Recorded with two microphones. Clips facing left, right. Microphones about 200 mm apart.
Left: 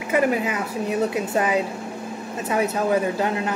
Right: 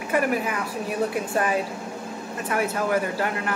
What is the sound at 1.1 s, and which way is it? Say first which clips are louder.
Speech: left 2 dB; 20° left (ahead or behind).